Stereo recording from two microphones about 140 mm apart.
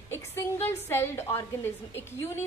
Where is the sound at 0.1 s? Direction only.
20° left (ahead or behind).